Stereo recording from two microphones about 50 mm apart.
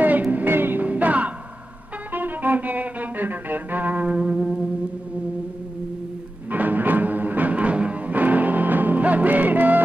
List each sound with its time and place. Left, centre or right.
0.0 s music: right
0.8 s music: right
6.5 s music: right